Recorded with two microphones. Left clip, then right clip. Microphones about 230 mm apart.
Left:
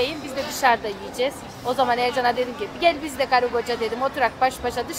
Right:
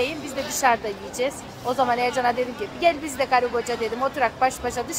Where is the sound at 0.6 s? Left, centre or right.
Centre.